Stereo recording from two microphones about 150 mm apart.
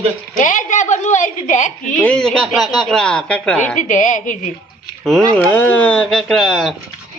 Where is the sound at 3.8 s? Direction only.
55° left (ahead or behind).